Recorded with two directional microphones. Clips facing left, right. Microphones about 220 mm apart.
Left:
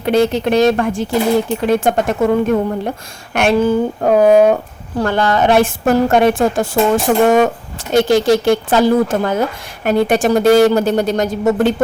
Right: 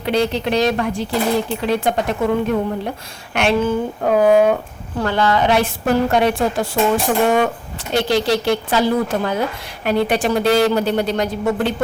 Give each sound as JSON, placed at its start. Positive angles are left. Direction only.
{"t": 0.0, "sound": "a woman's voice", "side_deg": 50}